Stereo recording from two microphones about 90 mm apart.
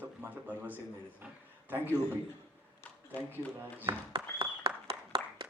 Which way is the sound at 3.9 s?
70° right (ahead or behind).